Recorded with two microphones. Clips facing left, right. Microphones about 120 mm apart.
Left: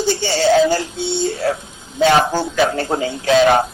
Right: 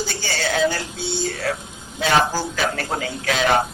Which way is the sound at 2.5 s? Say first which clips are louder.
Left 7 dB; 25° left (ahead or behind).